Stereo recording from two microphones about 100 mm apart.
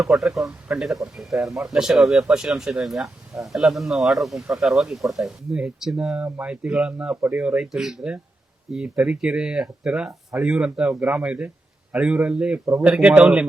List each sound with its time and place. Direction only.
0.0 s a man's voice: 5° right (ahead or behind)
6.2 s speech: 20° right (ahead or behind)
6.5 s a man's voice: 10° right (ahead or behind)